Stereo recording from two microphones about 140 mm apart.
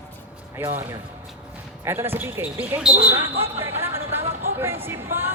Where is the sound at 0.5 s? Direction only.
20° right (ahead or behind).